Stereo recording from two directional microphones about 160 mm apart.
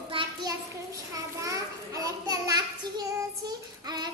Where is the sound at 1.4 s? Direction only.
20° right (ahead or behind).